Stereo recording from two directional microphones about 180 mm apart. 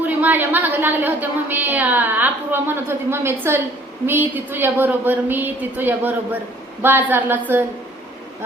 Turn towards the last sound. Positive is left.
turn(degrees=-10)  # may be behind; listen again after turning